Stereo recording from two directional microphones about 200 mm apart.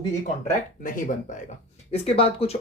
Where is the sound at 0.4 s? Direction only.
40° left (ahead or behind).